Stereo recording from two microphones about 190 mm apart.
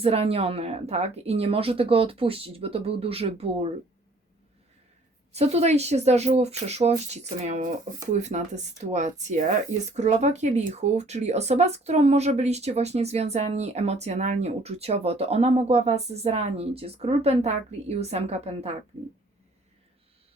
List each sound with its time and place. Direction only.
0.0 s speech: 30° right (ahead or behind)
5.3 s speech: 35° right (ahead or behind)